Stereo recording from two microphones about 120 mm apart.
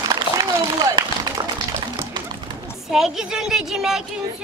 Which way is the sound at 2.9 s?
5° right (ahead or behind).